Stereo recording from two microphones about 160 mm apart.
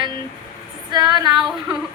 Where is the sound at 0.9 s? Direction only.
25° right (ahead or behind).